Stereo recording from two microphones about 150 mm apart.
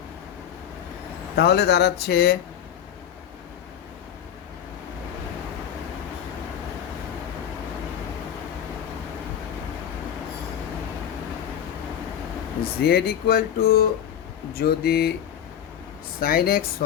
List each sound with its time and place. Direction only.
1.4 s speech: 90° left
12.8 s speech: 90° left
16.2 s speech: 90° left